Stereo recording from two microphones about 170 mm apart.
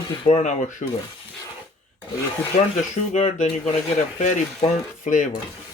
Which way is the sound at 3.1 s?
40° left (ahead or behind).